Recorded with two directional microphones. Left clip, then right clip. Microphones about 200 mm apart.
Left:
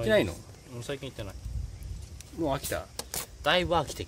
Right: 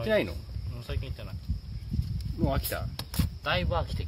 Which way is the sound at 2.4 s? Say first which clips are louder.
Left 1 dB; 5° left (ahead or behind).